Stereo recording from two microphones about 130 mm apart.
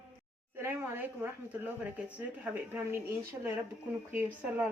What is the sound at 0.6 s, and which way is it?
Speech, 15° right (ahead or behind).